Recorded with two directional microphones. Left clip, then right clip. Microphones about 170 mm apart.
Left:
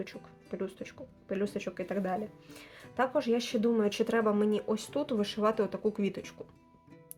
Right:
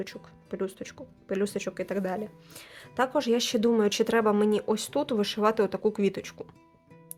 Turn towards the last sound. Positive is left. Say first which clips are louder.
# right 6 dB
turn(degrees=-45)  # may be behind; listen again after turning